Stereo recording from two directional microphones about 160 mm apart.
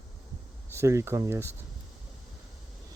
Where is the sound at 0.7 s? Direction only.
20° right (ahead or behind).